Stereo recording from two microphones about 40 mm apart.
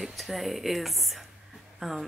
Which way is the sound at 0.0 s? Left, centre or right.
Centre.